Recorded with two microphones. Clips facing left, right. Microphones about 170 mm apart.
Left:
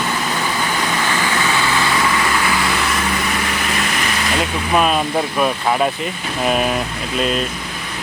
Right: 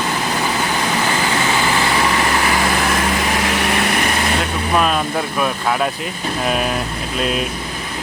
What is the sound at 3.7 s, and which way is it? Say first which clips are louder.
Vehicle: right 3 dB; 55° right (ahead or behind).